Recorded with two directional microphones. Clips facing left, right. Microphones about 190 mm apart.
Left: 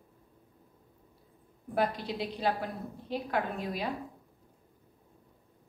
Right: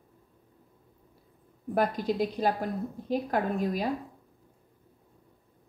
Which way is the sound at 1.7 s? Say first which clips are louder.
Right 4 dB; 45° right (ahead or behind).